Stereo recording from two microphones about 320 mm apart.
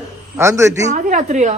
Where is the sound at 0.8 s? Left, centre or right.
Right.